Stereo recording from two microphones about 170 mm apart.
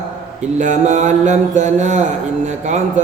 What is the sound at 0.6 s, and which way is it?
A man's voice, 45° right (ahead or behind).